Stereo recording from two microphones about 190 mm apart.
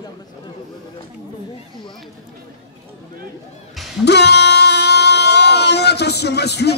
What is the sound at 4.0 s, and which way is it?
Music, 60° left (ahead or behind).